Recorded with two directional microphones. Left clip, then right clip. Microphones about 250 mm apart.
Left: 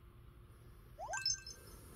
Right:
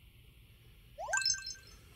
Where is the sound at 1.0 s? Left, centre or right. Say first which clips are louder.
Right 6 dB; right.